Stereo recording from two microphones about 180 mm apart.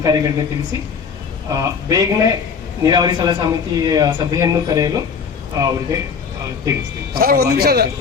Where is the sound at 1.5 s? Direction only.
20° right (ahead or behind).